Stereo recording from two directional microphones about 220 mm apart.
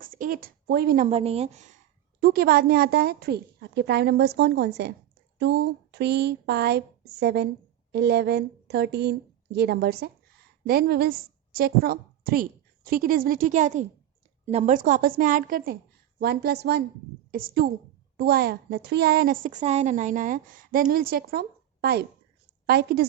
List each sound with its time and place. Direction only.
0.0 s speech: 40° right (ahead or behind)
2.2 s a woman's voice: 45° right (ahead or behind)